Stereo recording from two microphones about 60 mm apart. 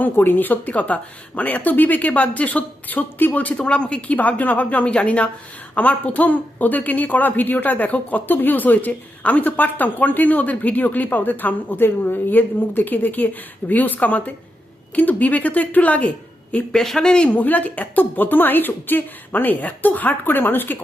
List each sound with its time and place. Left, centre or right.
0.0 s a woman's voice: left
16.7 s speech: centre
17.3 s a woman's voice: left